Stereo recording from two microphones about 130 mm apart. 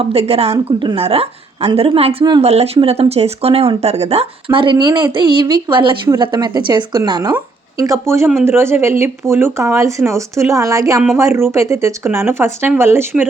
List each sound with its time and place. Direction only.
0.0 s speech: 50° right (ahead or behind); by 13.2 s 20° right (ahead or behind)